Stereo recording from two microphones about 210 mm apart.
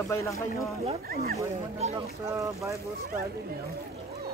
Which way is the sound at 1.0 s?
45° right (ahead or behind).